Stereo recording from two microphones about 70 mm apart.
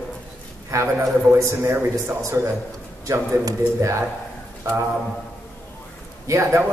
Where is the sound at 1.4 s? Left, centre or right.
Right.